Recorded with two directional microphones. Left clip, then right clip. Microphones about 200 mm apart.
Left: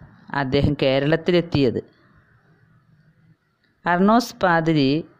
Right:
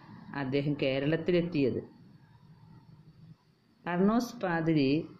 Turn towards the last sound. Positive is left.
turn(degrees=50)  # may be behind; listen again after turning